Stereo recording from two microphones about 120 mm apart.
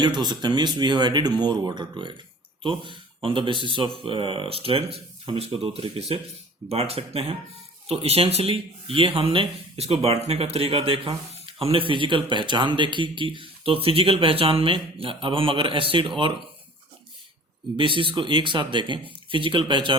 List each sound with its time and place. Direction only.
0.0 s speech: 40° right (ahead or behind)
17.7 s speech: 45° right (ahead or behind)